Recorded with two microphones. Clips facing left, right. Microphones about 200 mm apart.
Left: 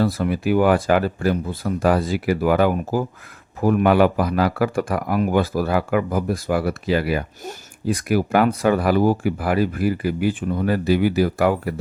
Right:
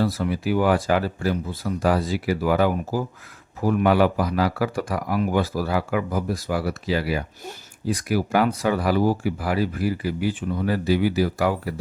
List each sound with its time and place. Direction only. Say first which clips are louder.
0.0 s speech: left 3 dB; 55° left (ahead or behind)